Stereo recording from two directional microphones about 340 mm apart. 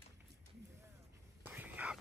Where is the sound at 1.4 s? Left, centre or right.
Centre.